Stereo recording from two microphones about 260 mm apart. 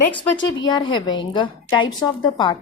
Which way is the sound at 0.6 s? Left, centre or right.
Centre.